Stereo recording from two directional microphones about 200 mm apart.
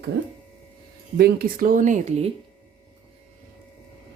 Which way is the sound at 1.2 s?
45° right (ahead or behind).